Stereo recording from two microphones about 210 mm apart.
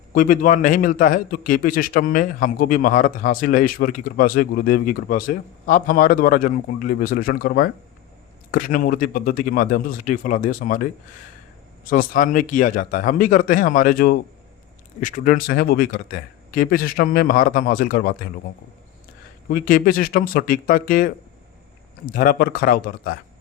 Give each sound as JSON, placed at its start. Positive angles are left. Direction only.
{"t": 0.1, "sound": "a man's voice", "side_deg": 40}
{"t": 11.9, "sound": "a man's voice", "side_deg": 40}
{"t": 19.5, "sound": "a man's voice", "side_deg": 45}
{"t": 22.1, "sound": "speech", "side_deg": 45}